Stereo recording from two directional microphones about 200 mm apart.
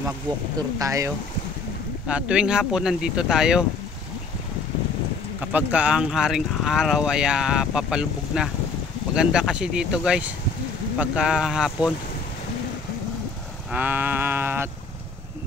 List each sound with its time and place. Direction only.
0.6 s sheep: 15° right (ahead or behind)
2.0 s speech: 5° right (ahead or behind)
5.4 s speech: 5° right (ahead or behind)
13.7 s sheep: 10° right (ahead or behind)